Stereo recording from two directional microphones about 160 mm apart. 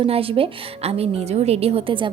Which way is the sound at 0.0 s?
35° right (ahead or behind).